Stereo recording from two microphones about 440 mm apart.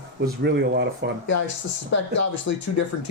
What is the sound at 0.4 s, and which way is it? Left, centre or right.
Speech, right.